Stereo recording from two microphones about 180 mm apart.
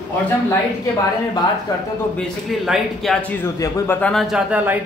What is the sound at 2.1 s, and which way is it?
Speech, centre (ahead or behind).